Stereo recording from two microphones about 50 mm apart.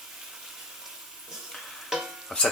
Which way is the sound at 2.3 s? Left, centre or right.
Centre.